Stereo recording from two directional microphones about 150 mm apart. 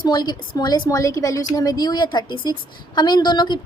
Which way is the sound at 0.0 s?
25° left (ahead or behind).